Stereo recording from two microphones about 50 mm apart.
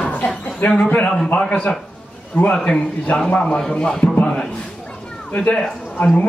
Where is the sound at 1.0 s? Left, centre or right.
Centre.